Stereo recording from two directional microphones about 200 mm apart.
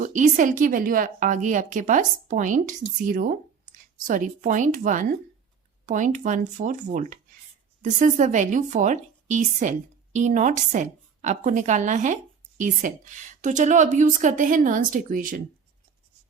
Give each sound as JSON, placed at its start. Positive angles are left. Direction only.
{"t": 0.0, "sound": "a woman's voice", "side_deg": -40}